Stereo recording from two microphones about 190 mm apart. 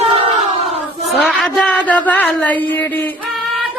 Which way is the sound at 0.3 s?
35° right (ahead or behind).